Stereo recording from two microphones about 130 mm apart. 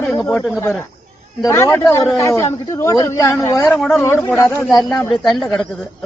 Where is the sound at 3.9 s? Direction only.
15° left (ahead or behind).